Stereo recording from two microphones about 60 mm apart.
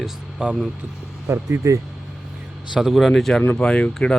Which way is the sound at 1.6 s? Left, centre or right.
Right.